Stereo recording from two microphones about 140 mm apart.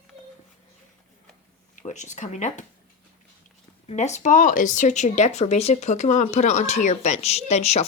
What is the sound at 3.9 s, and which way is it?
Speech, 55° left (ahead or behind).